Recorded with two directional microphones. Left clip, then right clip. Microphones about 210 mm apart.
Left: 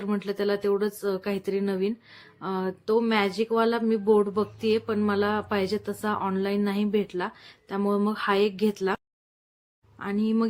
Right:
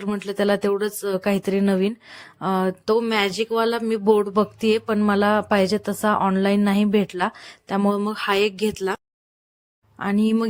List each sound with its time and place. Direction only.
0.0 s speech: 40° right (ahead or behind)
10.0 s speech: 40° right (ahead or behind)